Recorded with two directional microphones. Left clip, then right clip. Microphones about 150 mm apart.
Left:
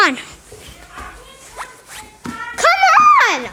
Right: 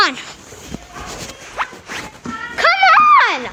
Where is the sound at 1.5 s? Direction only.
25° right (ahead or behind).